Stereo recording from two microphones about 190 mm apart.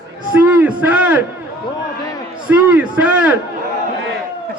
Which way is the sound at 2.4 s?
5° right (ahead or behind).